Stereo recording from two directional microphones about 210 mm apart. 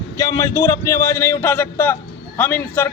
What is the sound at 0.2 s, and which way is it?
A man's voice, 15° left (ahead or behind).